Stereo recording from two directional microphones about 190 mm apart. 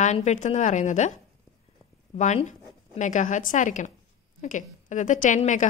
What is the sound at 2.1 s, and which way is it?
A woman's voice, 40° left (ahead or behind).